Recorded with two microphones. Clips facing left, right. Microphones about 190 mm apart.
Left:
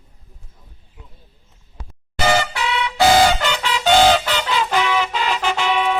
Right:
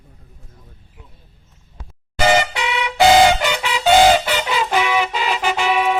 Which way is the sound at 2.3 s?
20° right (ahead or behind).